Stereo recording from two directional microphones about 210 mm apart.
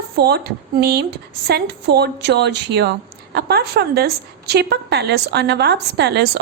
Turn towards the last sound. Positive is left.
turn(degrees=-50)  # may be behind; listen again after turning